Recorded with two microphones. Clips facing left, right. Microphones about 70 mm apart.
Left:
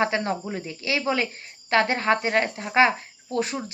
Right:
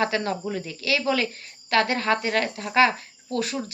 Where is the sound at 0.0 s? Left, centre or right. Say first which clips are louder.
Even; left.